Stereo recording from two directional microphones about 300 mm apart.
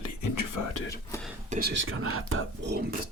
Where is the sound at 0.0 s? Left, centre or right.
Left.